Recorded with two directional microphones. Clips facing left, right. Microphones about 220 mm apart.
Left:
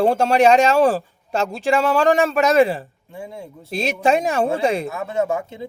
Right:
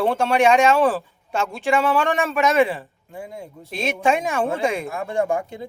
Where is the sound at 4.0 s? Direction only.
40° left (ahead or behind).